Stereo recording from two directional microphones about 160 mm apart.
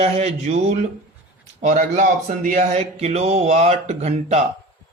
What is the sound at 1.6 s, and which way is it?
A man's voice, 55° right (ahead or behind).